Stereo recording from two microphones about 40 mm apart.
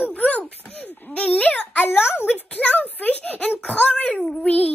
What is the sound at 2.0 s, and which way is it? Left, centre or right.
Speech, left.